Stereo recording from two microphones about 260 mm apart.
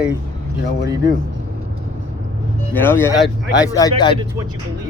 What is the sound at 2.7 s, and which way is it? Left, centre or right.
Speech, centre.